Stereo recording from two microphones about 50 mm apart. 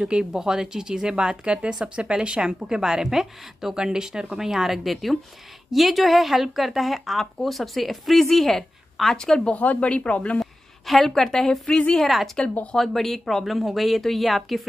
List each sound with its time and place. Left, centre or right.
0.0 s a woman's voice: centre
9.5 s speech: left
10.4 s a sound: centre
11.1 s speech: centre
12.7 s a woman's voice: centre